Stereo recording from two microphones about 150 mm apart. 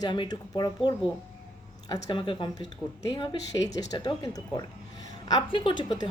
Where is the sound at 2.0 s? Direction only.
30° left (ahead or behind).